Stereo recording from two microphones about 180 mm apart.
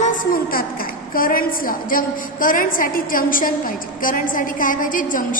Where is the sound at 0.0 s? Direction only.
50° left (ahead or behind).